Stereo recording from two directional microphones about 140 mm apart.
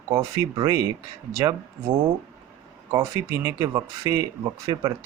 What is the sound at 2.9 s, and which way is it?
Speech, 25° right (ahead or behind).